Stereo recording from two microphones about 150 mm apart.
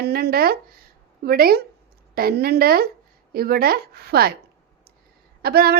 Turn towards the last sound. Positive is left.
turn(degrees=-90)